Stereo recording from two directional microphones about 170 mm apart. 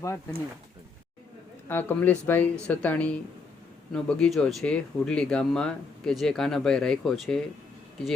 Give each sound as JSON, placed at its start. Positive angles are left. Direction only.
{"t": 0.0, "sound": "speech", "side_deg": 20}
{"t": 1.6, "sound": "speech", "side_deg": 10}